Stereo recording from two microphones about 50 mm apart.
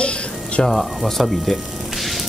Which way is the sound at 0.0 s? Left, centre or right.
Left.